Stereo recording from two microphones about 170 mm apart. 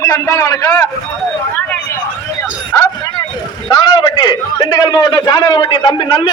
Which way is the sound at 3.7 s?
25° left (ahead or behind).